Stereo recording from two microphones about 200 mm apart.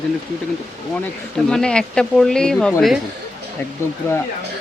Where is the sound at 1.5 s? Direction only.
5° left (ahead or behind).